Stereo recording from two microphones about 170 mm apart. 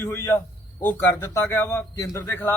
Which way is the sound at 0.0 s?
15° left (ahead or behind).